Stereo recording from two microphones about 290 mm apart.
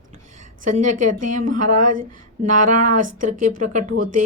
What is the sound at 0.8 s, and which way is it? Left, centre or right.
Speech, right.